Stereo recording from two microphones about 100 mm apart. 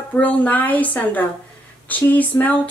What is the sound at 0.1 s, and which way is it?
Speech, 15° left (ahead or behind).